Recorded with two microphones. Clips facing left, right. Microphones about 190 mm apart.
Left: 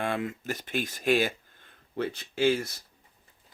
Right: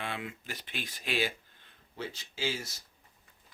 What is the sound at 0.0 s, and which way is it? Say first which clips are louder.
Speech: left 8 dB; 45° left (ahead or behind).